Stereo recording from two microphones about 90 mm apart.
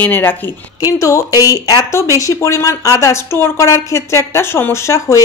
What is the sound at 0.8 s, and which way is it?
Speech, 40° left (ahead or behind).